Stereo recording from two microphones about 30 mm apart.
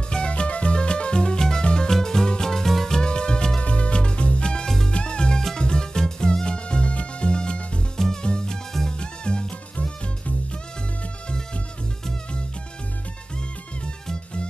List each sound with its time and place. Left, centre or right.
0.3 s music: left
1.9 s music: centre
2.2 s music: left
2.5 s music: centre
3.0 s music: left
3.6 s music: left
9.8 s music: left